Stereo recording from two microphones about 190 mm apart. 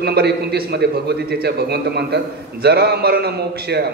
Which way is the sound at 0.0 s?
55° right (ahead or behind).